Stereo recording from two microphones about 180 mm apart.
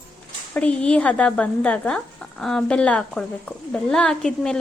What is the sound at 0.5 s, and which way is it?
A woman's voice, 5° left (ahead or behind).